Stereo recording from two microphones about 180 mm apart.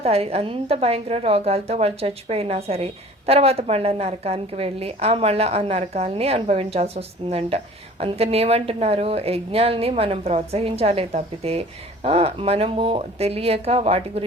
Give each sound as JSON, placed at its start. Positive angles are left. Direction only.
{"t": 0.0, "sound": "a woman's voice", "side_deg": -35}